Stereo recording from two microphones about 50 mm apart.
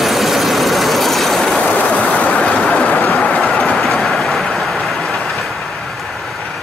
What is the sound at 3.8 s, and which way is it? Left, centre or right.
Vehicle, centre.